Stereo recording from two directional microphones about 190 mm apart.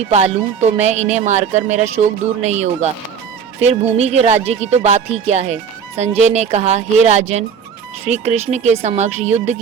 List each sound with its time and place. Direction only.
0.0 s speech: 35° right (ahead or behind)
3.9 s speech: 35° right (ahead or behind)